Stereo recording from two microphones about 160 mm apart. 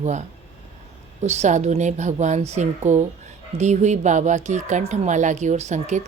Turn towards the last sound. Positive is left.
turn(degrees=-50)  # may be behind; listen again after turning